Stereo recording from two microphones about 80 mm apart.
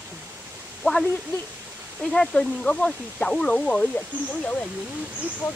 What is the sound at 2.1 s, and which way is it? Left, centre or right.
Speech, centre.